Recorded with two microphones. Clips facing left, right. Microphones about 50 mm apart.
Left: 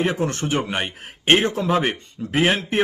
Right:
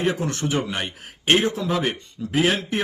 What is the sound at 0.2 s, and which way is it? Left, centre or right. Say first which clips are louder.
Speech: left 2 dB; left.